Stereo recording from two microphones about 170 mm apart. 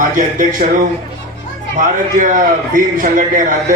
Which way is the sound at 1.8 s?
55° right (ahead or behind).